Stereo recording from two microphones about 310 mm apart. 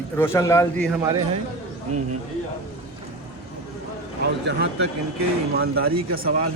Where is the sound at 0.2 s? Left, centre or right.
Centre.